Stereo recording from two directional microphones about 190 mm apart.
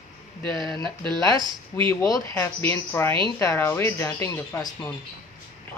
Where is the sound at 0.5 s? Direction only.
25° right (ahead or behind).